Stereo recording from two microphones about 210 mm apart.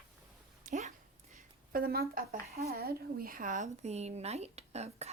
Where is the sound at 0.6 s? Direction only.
35° right (ahead or behind).